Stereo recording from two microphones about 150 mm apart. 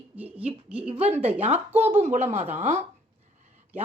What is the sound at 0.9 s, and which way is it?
Speech, 45° right (ahead or behind).